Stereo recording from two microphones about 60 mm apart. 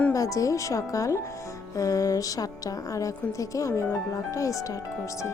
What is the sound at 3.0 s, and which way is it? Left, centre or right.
Speech, left.